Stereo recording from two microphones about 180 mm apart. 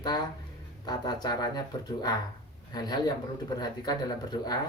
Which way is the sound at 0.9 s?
20° left (ahead or behind).